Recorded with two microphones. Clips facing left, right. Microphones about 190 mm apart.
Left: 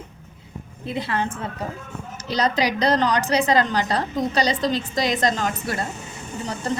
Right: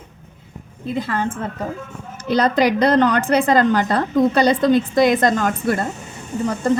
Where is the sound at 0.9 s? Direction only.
45° right (ahead or behind).